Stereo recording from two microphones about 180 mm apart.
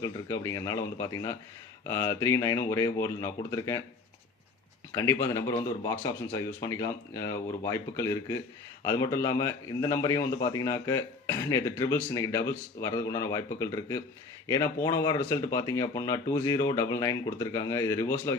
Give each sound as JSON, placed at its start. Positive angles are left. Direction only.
{"t": 0.0, "sound": "a man's voice", "side_deg": 20}
{"t": 4.9, "sound": "a man's voice", "side_deg": 15}